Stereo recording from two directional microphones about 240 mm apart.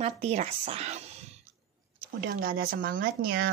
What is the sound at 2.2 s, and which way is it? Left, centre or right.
Speech, right.